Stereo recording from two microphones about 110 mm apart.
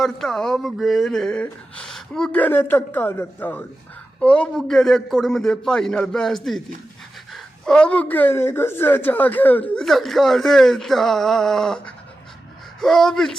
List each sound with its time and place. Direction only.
0.0 s a man's voice: 5° left (ahead or behind)
9.8 s a man's voice: 5° left (ahead or behind)